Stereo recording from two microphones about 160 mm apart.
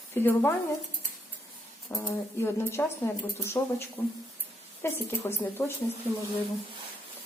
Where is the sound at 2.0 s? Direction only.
15° left (ahead or behind).